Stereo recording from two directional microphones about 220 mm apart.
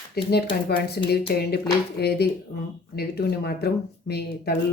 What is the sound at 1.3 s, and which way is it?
Speech, 45° left (ahead or behind).